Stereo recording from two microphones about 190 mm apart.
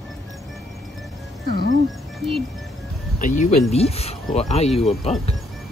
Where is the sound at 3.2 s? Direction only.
40° left (ahead or behind).